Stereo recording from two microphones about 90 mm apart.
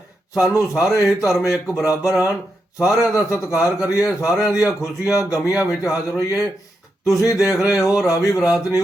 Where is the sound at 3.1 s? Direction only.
35° left (ahead or behind).